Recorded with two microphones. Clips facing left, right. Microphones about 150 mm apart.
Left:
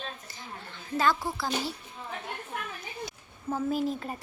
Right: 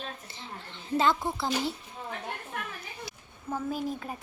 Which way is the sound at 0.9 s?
20° right (ahead or behind).